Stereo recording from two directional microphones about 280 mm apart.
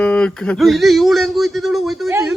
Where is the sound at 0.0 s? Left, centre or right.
Centre.